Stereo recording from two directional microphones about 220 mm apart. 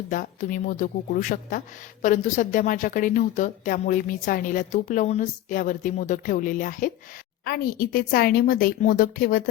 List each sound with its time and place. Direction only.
0.1 s a woman's voice: 35° left (ahead or behind)